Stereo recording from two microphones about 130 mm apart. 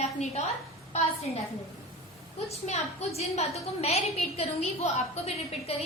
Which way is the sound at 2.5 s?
55° left (ahead or behind).